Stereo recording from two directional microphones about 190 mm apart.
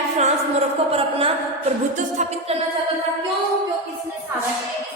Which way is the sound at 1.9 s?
40° right (ahead or behind).